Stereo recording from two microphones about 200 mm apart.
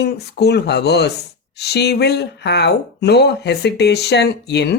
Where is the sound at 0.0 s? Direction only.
55° left (ahead or behind).